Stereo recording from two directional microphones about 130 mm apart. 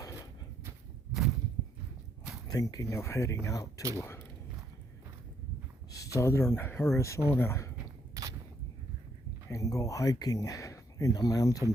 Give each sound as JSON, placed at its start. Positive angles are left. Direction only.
{"t": 2.5, "sound": "speech", "side_deg": 25}
{"t": 5.9, "sound": "speech", "side_deg": 25}
{"t": 8.1, "sound": "a sound", "side_deg": -25}
{"t": 9.5, "sound": "speech", "side_deg": 25}